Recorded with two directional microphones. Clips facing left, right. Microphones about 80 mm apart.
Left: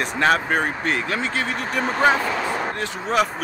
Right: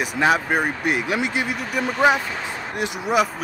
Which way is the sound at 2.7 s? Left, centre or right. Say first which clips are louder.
Right 4 dB; centre.